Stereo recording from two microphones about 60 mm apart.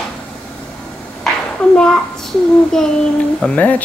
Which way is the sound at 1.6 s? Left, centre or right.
Centre.